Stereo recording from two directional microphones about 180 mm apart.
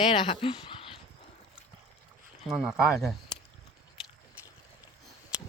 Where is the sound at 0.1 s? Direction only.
30° left (ahead or behind).